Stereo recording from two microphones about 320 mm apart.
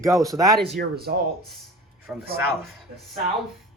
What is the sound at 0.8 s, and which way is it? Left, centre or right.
Speech, right.